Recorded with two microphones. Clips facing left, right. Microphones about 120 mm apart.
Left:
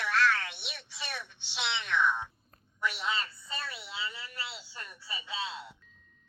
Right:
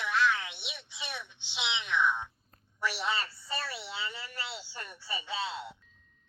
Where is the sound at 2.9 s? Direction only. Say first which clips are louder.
Right 1 dB; 30° right (ahead or behind).